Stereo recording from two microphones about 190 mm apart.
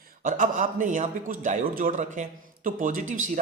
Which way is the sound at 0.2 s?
45° right (ahead or behind).